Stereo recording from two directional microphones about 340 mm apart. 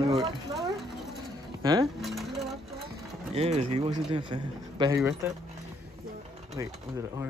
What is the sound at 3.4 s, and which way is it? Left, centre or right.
A man's voice, centre.